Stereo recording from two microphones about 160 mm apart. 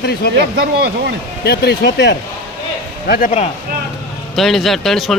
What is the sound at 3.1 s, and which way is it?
Speech, 55° left (ahead or behind).